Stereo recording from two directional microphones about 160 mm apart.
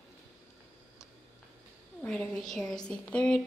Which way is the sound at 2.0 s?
5° left (ahead or behind).